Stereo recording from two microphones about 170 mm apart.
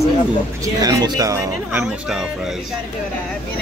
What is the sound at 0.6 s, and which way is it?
Speech, 20° right (ahead or behind).